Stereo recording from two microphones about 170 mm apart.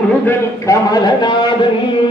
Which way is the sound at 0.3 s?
20° left (ahead or behind).